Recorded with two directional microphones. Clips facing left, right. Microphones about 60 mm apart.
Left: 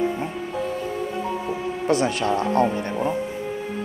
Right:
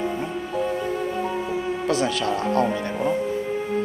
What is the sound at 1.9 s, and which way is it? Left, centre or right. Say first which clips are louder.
Speech: left 3 dB; left.